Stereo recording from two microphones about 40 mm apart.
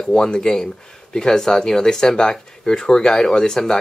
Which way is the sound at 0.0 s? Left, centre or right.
Centre.